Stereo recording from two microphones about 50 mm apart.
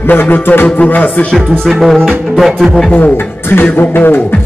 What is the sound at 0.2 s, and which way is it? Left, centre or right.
Music, left.